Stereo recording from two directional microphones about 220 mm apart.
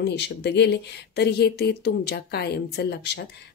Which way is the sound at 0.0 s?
50° left (ahead or behind).